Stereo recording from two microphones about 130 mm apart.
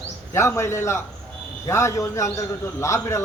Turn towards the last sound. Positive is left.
turn(degrees=20)  # may be behind; listen again after turning